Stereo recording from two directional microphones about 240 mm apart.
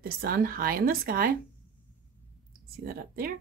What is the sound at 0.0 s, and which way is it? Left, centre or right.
Speech, right.